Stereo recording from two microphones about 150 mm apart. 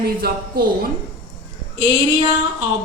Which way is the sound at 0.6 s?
80° right.